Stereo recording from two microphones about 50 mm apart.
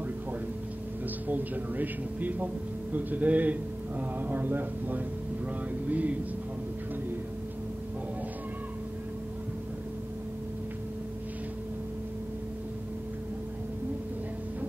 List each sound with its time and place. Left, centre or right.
1.2 s speech: right